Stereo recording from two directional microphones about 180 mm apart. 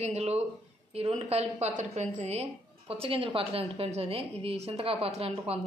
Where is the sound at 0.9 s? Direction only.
35° right (ahead or behind).